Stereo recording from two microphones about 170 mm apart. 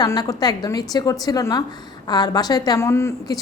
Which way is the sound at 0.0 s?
20° left (ahead or behind).